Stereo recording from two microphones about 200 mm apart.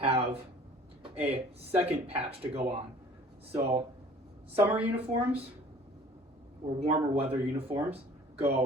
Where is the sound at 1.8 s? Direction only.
30° right (ahead or behind).